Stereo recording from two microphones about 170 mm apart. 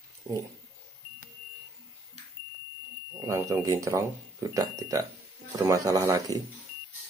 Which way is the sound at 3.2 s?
15° right (ahead or behind).